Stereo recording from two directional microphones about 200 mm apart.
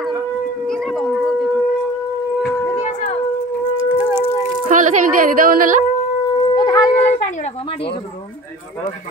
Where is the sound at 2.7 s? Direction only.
35° left (ahead or behind).